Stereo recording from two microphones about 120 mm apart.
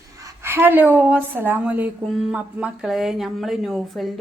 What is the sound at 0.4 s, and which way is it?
A woman's voice, 20° right (ahead or behind).